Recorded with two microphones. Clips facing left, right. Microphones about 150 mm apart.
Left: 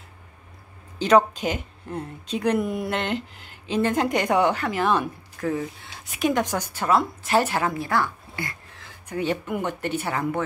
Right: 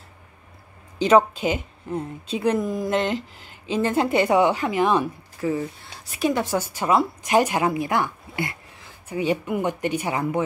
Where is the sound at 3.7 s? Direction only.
10° right (ahead or behind).